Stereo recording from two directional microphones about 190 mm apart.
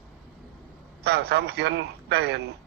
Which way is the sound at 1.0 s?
60° right (ahead or behind).